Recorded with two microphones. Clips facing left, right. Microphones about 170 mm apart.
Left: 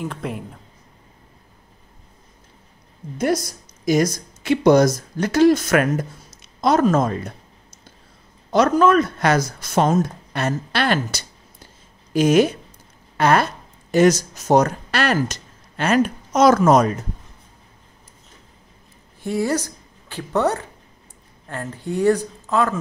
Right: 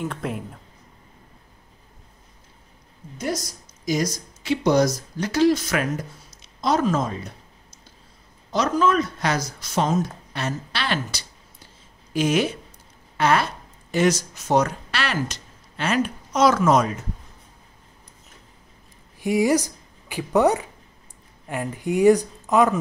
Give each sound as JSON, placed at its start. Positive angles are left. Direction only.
{"t": 0.0, "sound": "speech", "side_deg": 0}
{"t": 3.2, "sound": "speech", "side_deg": 60}
{"t": 8.5, "sound": "speech", "side_deg": 55}
{"t": 19.2, "sound": "speech", "side_deg": -15}